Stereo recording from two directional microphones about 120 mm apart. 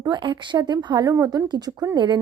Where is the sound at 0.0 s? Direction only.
40° right (ahead or behind).